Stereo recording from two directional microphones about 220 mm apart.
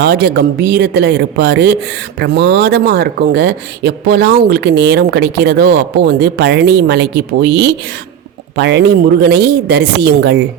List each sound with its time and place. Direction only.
0.0 s speech: 50° right (ahead or behind)